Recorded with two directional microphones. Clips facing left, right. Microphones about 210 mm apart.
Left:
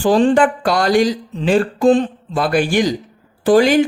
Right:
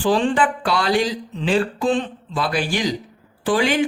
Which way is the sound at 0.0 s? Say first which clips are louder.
Left 6 dB; 40° left (ahead or behind).